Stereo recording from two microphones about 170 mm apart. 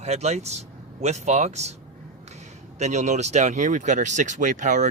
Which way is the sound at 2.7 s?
45° right (ahead or behind).